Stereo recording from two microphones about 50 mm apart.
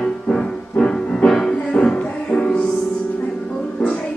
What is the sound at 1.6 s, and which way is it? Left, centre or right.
Music, left.